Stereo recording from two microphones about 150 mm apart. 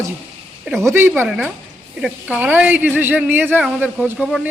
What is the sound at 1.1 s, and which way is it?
Speech, 5° right (ahead or behind).